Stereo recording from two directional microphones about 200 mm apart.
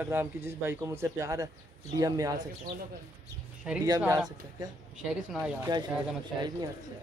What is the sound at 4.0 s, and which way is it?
Speech, 5° right (ahead or behind).